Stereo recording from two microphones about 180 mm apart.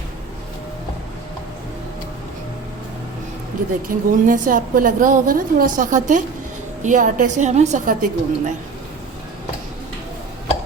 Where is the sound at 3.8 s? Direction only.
50° right (ahead or behind).